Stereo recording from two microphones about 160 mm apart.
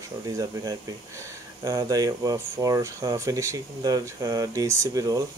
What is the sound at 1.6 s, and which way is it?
Speech, 20° right (ahead or behind).